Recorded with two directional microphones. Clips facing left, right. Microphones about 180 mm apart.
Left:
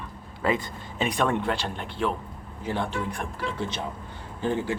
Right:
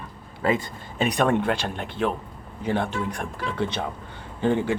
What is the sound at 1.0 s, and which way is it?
A man's voice, 55° right (ahead or behind).